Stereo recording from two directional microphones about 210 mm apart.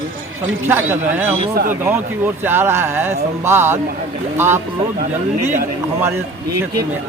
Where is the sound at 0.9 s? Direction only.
10° right (ahead or behind).